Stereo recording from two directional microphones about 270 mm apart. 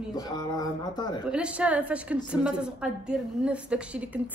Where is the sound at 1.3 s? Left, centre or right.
Centre.